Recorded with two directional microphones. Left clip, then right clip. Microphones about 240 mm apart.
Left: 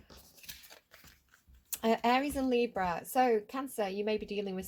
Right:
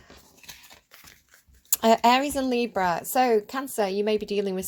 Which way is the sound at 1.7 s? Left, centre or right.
Right.